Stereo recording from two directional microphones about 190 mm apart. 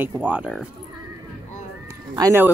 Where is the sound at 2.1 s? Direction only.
15° right (ahead or behind).